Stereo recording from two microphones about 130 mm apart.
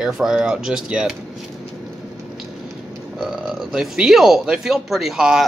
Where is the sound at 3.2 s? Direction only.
5° right (ahead or behind).